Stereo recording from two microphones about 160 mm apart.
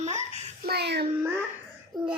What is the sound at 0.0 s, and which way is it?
Babbling, 45° right (ahead or behind).